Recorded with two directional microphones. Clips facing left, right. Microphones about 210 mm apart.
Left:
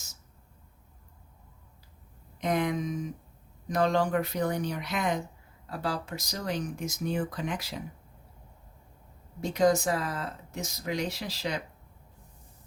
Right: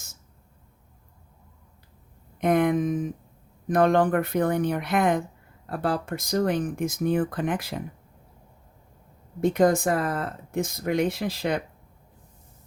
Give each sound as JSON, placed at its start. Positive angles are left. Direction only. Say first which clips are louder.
{"t": 2.4, "sound": "a sound", "louder": "right 7 dB", "side_deg": -55}
{"t": 3.7, "sound": "speech", "louder": "right 6 dB", "side_deg": -55}
{"t": 9.4, "sound": "speech", "louder": "right 4 dB", "side_deg": -55}